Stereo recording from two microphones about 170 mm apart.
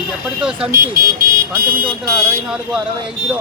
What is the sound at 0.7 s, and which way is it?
Speech, 60° right (ahead or behind).